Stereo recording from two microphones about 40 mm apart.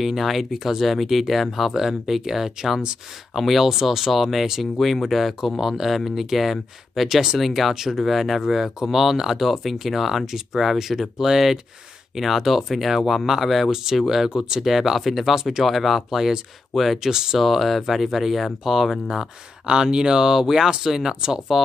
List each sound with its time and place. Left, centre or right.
0.0 s speech: centre
17.0 s speech: centre
17.4 s speech: centre
19.7 s speech: centre